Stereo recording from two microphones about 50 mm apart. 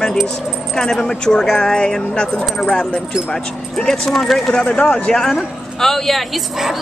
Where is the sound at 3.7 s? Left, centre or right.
Centre.